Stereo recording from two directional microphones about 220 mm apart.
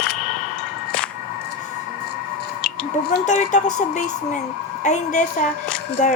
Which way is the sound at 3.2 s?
35° left (ahead or behind).